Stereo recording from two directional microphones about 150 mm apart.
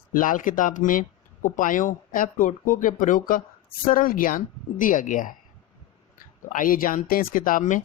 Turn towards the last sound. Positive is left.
turn(degrees=60)  # may be behind; listen again after turning